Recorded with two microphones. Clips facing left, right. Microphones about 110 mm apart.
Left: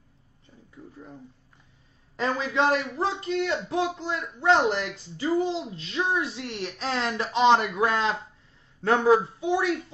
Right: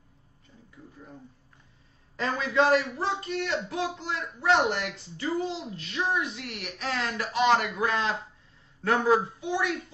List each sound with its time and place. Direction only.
2.1 s a man's voice: 25° left (ahead or behind)